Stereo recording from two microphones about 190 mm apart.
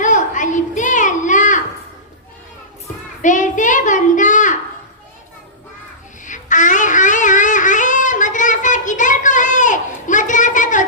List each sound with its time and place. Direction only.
0.0 s a sound: 40° left (ahead or behind)
3.2 s child singing: 40° left (ahead or behind)
6.2 s music: 40° left (ahead or behind)